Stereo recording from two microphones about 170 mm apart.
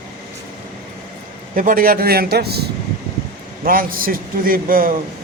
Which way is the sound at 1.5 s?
55° right (ahead or behind).